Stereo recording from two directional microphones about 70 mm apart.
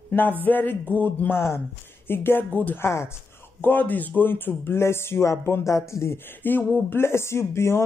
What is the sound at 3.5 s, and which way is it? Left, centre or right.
Speech, left.